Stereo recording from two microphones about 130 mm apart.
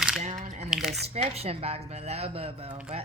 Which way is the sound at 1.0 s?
55° right (ahead or behind).